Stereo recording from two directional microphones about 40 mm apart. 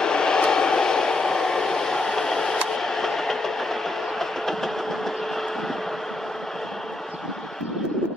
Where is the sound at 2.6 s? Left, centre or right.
Centre.